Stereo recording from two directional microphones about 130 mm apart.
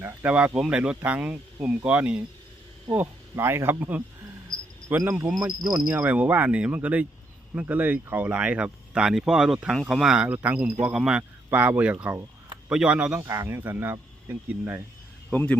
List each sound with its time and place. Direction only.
0.0 s speech: 10° right (ahead or behind)
4.5 s cricket: 90° left
4.9 s speech: 15° right (ahead or behind)
13.2 s speech: 20° right (ahead or behind)
15.3 s speech: 10° left (ahead or behind)